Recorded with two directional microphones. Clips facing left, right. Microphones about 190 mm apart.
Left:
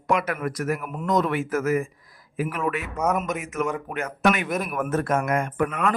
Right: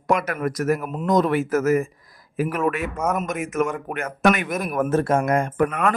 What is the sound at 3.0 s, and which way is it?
Speech, 5° right (ahead or behind).